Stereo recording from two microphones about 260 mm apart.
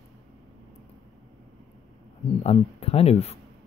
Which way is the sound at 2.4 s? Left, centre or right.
Left.